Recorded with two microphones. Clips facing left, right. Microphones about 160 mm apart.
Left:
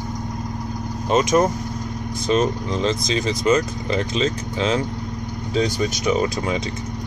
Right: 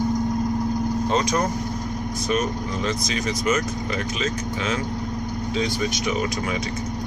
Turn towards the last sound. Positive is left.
turn(degrees=40)  # may be behind; listen again after turning